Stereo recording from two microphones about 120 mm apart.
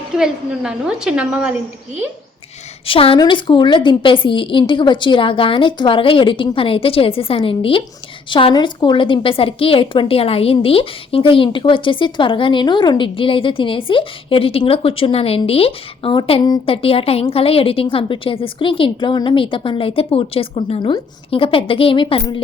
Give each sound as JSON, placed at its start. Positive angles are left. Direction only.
{"t": 0.2, "sound": "a woman's voice", "side_deg": -5}
{"t": 2.8, "sound": "a woman's voice", "side_deg": 50}